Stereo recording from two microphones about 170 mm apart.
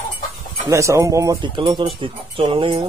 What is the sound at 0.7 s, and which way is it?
Speech, 15° right (ahead or behind).